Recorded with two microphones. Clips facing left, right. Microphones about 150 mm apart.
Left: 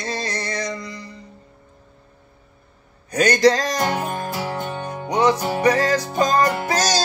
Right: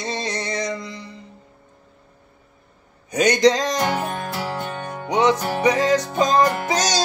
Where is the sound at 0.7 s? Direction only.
25° right (ahead or behind).